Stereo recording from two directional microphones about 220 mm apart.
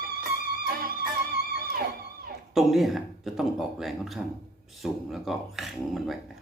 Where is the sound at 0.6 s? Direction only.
45° right (ahead or behind).